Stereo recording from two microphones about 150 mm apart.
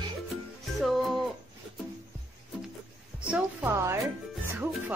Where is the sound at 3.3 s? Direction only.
10° right (ahead or behind).